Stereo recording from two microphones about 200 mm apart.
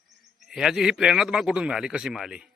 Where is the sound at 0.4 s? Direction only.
Centre (ahead or behind).